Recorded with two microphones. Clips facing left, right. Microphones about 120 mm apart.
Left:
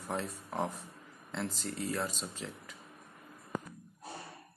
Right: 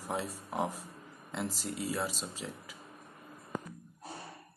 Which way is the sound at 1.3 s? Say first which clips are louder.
Right 1 dB; 5° right (ahead or behind).